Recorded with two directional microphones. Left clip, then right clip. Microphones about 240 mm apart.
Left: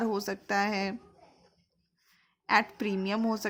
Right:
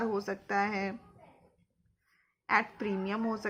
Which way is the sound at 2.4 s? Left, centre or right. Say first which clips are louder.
Left 3 dB; left.